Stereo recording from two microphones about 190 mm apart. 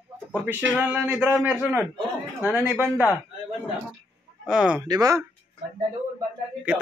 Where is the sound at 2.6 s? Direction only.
10° right (ahead or behind).